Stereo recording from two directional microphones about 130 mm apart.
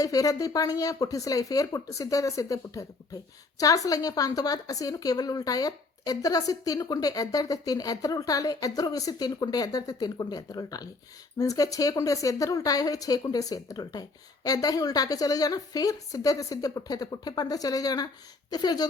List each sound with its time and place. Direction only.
0.0 s a woman's voice: 25° left (ahead or behind)